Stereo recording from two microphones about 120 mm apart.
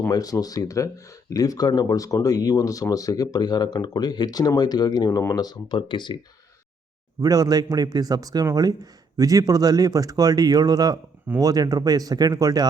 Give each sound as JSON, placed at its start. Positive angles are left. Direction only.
{"t": 0.1, "sound": "speech", "side_deg": 30}
{"t": 7.2, "sound": "speech", "side_deg": -30}